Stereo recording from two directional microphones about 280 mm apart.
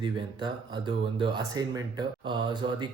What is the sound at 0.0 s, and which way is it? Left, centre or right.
Speech, centre.